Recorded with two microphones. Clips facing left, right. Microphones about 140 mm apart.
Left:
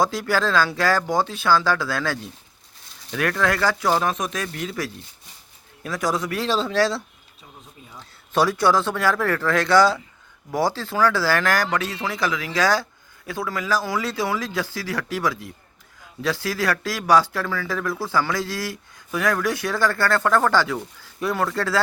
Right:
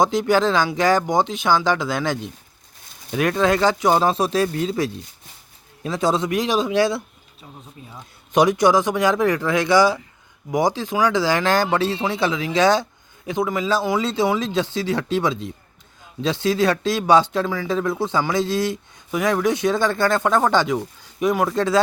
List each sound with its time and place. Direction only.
0.0 s speech: 20° right (ahead or behind)